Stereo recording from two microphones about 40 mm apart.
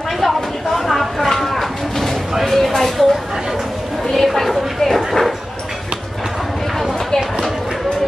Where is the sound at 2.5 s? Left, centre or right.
Centre.